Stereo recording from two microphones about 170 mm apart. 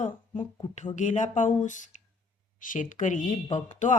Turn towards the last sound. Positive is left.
turn(degrees=45)  # may be behind; listen again after turning